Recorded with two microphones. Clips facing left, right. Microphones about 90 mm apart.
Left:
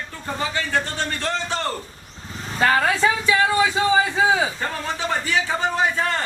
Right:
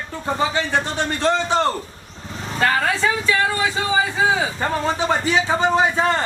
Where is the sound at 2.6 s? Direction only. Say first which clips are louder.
Left 1 dB; 5° left (ahead or behind).